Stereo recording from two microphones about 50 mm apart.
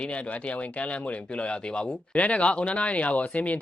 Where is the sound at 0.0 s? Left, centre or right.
Left.